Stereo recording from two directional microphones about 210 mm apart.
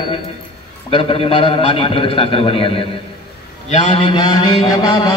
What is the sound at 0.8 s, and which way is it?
Mantra, 25° left (ahead or behind).